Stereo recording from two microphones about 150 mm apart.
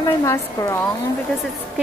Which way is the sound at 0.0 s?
20° left (ahead or behind).